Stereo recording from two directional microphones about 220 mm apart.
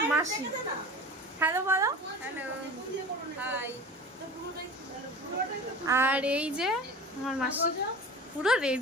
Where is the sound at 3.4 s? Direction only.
10° right (ahead or behind).